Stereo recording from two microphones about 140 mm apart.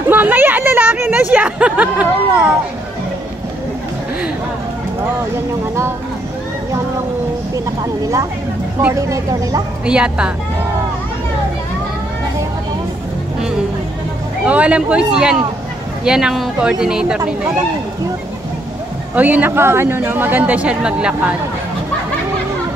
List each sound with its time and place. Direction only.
0.1 s speech: 15° right (ahead or behind)
7.5 s speech: 25° right (ahead or behind)
9.8 s speech: 5° right (ahead or behind)
14.4 s speech: 10° right (ahead or behind)
19.1 s speech: 10° right (ahead or behind)